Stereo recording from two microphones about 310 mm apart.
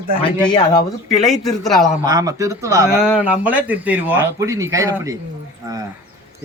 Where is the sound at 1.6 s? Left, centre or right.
Centre.